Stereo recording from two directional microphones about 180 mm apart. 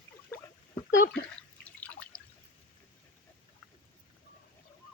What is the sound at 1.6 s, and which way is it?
Drip, 10° left (ahead or behind).